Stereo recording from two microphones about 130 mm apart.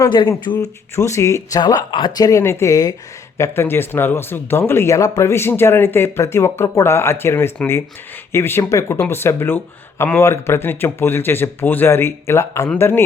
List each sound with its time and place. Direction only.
0.6 s speech: 25° left (ahead or behind)